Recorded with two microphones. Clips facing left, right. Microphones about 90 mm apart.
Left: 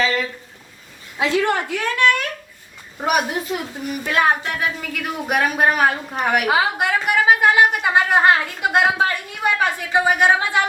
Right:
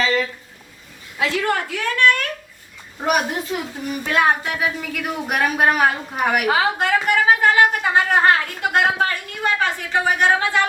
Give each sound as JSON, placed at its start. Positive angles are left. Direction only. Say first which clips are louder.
{"t": 0.0, "sound": "a sound", "louder": "right 1 dB", "side_deg": 0}
{"t": 1.2, "sound": "a woman's voice", "louder": "left 2 dB", "side_deg": 20}
{"t": 3.0, "sound": "speech", "louder": "even", "side_deg": 5}
{"t": 6.6, "sound": "a woman's voice", "louder": "right 1 dB", "side_deg": 10}